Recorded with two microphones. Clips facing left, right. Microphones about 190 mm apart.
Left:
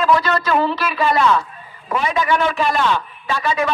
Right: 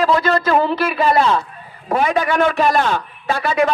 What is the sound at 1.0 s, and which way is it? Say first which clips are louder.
Speech: even; 35° right (ahead or behind).